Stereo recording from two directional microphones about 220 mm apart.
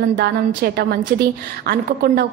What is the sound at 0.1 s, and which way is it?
A woman's voice, 50° right (ahead or behind).